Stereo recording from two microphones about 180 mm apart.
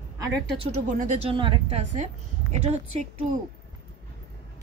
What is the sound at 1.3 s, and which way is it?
A woman's voice, 30° right (ahead or behind).